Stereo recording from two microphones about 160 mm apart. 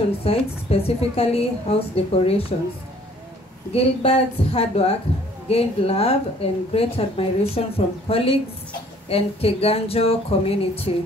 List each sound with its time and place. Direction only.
0.2 s speech: 40° left (ahead or behind)
3.7 s speech: 40° left (ahead or behind)